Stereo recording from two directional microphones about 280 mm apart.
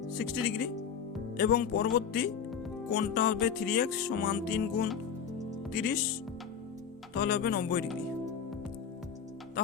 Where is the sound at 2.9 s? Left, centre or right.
Left.